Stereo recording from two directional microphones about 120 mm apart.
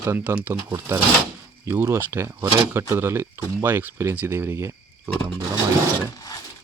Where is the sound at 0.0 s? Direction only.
20° right (ahead or behind).